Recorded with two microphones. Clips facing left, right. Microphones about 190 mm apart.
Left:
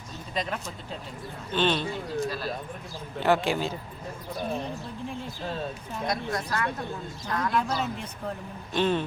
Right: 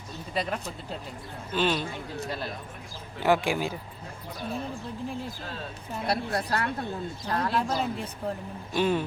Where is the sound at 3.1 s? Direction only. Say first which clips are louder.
Even; 10° right (ahead or behind).